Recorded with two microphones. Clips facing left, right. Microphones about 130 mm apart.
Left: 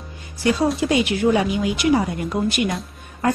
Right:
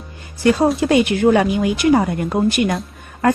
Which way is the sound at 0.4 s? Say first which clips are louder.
Right 4 dB; 50° right (ahead or behind).